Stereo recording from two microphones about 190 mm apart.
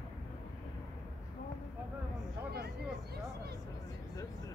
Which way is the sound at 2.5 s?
55° right (ahead or behind).